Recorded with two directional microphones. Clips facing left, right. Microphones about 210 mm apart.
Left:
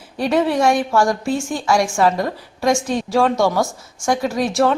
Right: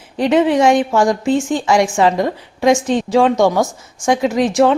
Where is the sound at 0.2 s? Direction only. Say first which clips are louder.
Right 4 dB; 20° right (ahead or behind).